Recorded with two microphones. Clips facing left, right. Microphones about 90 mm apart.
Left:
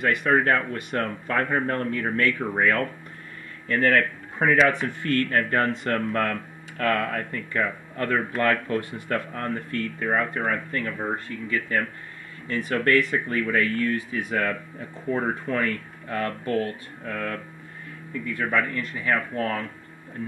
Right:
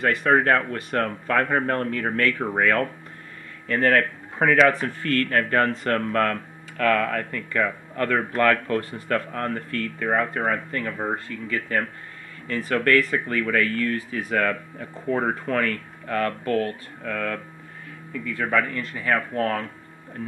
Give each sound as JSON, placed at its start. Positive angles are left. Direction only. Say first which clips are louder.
{"t": 0.0, "sound": "speech", "louder": "right 2 dB", "side_deg": -40}
{"t": 4.4, "sound": "speech", "louder": "right 2 dB", "side_deg": -75}
{"t": 4.6, "sound": "speech", "louder": "right 2 dB", "side_deg": -45}
{"t": 6.8, "sound": "speech", "louder": "right 3 dB", "side_deg": -75}
{"t": 8.6, "sound": "speech", "louder": "right 2 dB", "side_deg": -50}
{"t": 12.4, "sound": "speech", "louder": "right 1 dB", "side_deg": -45}
{"t": 13.1, "sound": "speech", "louder": "right 1 dB", "side_deg": -60}
{"t": 18.4, "sound": "speech", "louder": "right 2 dB", "side_deg": -55}